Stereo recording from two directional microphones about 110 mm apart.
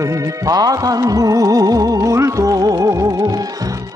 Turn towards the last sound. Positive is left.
turn(degrees=-35)  # may be behind; listen again after turning